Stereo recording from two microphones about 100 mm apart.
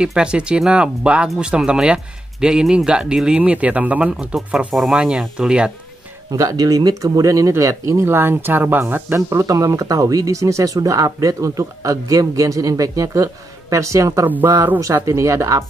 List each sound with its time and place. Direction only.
0.0 s speech: 10° right (ahead or behind)
6.3 s speech: 35° right (ahead or behind)